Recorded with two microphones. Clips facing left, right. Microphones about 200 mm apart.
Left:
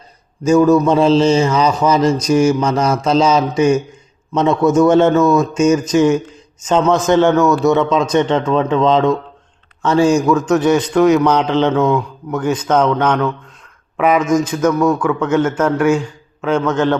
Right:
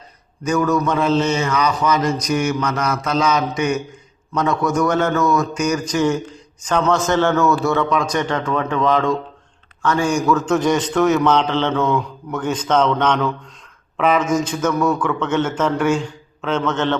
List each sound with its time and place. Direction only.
0.4 s a man's voice: 25° left (ahead or behind)
10.4 s a man's voice: 5° left (ahead or behind)